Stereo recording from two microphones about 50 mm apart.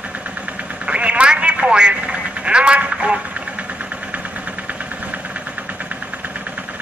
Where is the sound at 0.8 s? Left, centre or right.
Right.